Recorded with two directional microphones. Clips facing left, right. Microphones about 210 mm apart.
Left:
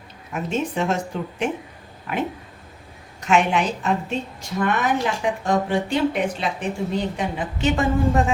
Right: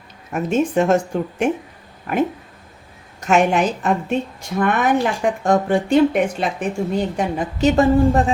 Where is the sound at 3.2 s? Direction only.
45° right (ahead or behind).